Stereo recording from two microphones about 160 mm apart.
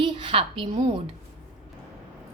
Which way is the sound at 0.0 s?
30° right (ahead or behind).